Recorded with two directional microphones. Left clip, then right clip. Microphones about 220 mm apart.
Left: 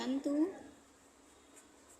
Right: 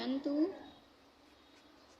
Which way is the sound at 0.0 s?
20° left (ahead or behind).